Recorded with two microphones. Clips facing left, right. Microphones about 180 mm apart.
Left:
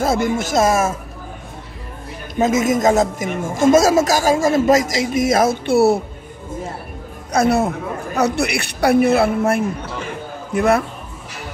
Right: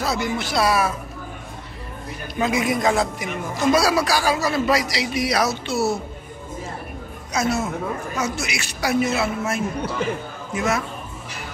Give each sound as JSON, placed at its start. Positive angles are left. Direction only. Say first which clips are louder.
{"t": 0.0, "sound": "a man's voice", "louder": "left 6 dB", "side_deg": 50}
{"t": 2.4, "sound": "a man's voice", "louder": "left 5 dB", "side_deg": 45}
{"t": 7.3, "sound": "a woman's voice", "louder": "left 6 dB", "side_deg": 60}